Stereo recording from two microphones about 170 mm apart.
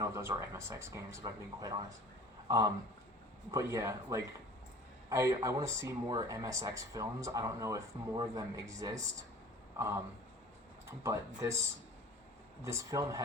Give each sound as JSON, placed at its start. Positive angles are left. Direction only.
{"t": 0.0, "sound": "a man's voice", "side_deg": -15}
{"t": 11.0, "sound": "speech", "side_deg": -20}
{"t": 12.6, "sound": "speech", "side_deg": -20}